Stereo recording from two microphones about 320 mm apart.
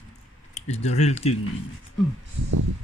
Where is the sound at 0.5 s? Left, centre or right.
Centre.